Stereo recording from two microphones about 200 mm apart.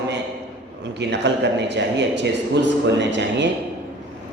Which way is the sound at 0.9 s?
60° right (ahead or behind).